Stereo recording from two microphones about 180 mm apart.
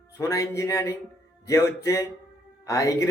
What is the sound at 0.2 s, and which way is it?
Speech, 20° left (ahead or behind).